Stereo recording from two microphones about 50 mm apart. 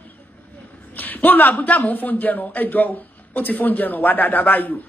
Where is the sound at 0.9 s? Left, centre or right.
Left.